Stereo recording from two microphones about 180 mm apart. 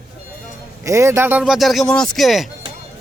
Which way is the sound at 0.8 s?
15° right (ahead or behind).